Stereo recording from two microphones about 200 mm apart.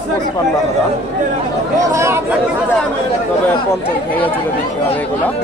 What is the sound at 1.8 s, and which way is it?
Speech, 15° right (ahead or behind).